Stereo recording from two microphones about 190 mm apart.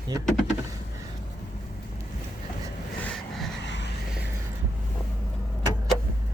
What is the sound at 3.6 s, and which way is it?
Vehicle, 65° left (ahead or behind).